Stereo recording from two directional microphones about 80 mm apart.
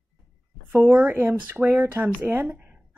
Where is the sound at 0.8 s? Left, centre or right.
Centre.